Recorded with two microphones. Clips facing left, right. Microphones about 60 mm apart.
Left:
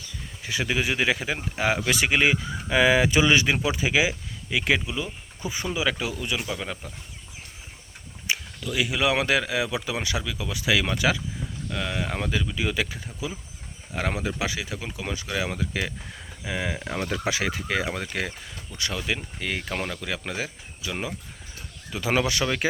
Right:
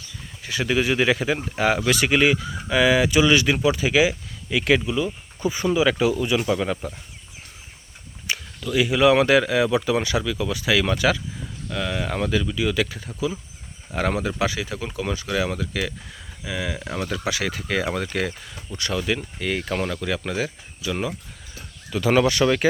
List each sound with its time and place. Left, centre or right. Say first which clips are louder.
0.4 s speech: right 4 dB; centre
8.3 s speech: right 3 dB; centre
12.5 s speech: right 4 dB; left
13.9 s speech: right 4 dB; centre
15.6 s speech: right 2 dB; left
17.5 s speech: right 3 dB; centre